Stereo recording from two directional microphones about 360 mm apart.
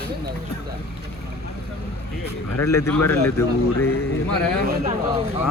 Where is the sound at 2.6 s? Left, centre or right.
Centre.